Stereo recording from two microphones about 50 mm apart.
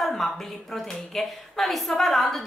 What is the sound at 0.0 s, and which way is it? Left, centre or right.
A woman's voice, centre.